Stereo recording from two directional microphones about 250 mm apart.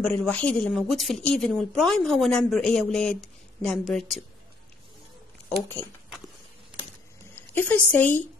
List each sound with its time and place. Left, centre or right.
0.0 s a woman's voice: centre
5.8 s a sound: centre
7.3 s speech: centre